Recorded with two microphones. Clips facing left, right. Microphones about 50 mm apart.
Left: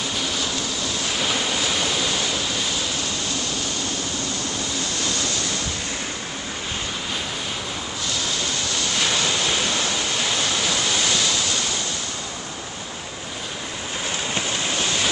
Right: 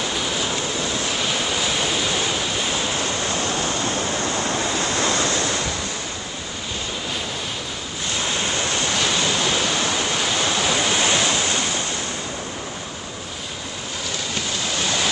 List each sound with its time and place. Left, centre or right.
1.2 s waterfall: centre
2.7 s a sound: right
8.2 s waves: right
10.7 s waves: right